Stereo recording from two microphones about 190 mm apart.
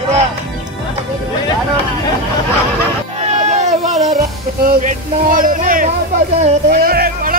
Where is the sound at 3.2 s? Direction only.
35° right (ahead or behind).